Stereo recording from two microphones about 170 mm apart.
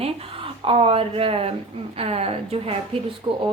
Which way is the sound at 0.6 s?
35° right (ahead or behind).